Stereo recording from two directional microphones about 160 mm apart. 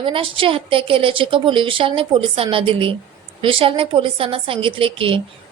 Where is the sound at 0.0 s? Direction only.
35° right (ahead or behind).